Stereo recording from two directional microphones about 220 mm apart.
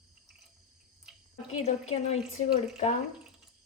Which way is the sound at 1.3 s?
30° left (ahead or behind).